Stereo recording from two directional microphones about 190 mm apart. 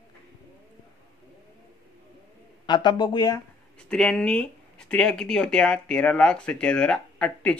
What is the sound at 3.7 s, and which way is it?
Speech, 5° left (ahead or behind).